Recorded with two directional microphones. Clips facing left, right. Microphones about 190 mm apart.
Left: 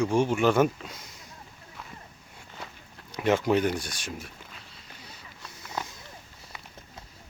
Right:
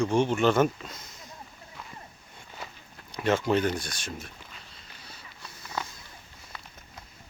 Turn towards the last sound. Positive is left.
turn(degrees=15)  # may be behind; listen again after turning